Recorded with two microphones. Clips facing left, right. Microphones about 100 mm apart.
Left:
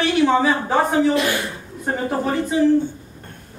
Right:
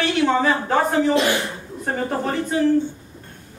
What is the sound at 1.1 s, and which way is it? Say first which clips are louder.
Speech: right 1 dB; 20° right (ahead or behind).